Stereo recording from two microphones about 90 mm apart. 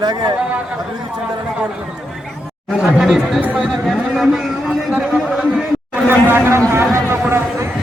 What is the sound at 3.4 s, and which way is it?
Speech, 15° right (ahead or behind).